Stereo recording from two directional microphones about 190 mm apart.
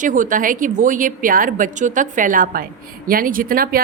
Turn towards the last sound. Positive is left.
turn(degrees=-50)  # may be behind; listen again after turning